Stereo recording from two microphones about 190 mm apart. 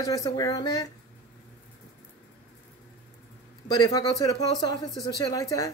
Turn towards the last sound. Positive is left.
turn(degrees=20)  # may be behind; listen again after turning